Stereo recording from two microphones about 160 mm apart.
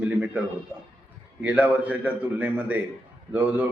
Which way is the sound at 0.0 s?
10° right (ahead or behind).